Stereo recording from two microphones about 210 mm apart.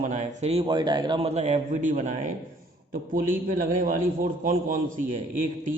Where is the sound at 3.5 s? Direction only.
40° right (ahead or behind).